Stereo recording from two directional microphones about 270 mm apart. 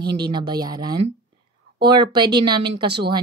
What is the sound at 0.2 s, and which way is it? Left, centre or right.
Speech, centre.